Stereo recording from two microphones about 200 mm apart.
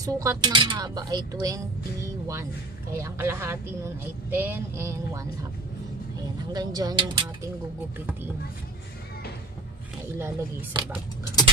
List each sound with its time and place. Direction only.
0.0 s speech: 15° right (ahead or behind)
2.9 s speech: 15° right (ahead or behind)
6.5 s speech: 20° right (ahead or behind)
10.1 s speech: 15° right (ahead or behind)